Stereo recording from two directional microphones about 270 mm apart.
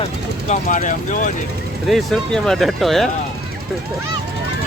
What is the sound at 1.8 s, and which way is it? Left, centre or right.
Speech, centre.